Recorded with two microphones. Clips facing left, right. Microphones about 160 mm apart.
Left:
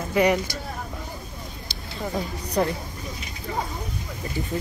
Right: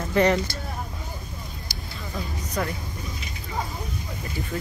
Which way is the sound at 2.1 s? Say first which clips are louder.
Left 5 dB; 35° left (ahead or behind).